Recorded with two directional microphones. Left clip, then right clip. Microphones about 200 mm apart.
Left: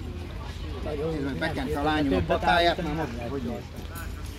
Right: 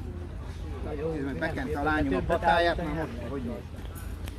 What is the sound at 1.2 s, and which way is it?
Speech, 10° left (ahead or behind).